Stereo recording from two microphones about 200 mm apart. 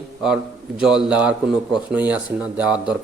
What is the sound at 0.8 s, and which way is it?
A man's voice, 5° right (ahead or behind).